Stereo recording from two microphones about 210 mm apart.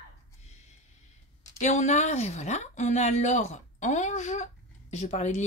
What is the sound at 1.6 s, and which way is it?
Speech, 35° left (ahead or behind).